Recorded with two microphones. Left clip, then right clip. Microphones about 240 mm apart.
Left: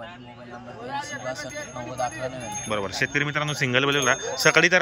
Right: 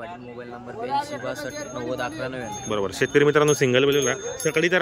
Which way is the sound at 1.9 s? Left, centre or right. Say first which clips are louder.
Left 1 dB; centre.